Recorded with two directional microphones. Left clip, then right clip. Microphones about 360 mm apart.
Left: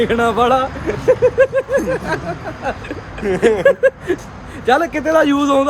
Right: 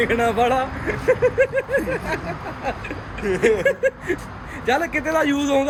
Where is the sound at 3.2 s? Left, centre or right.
Left.